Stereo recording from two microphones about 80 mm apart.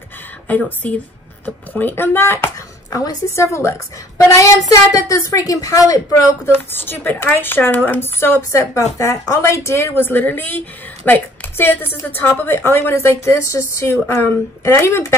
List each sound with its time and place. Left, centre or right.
0.5 s a woman's voice: centre; by 3.7 s left
4.3 s a woman's voice: left
6.4 s a woman's voice: left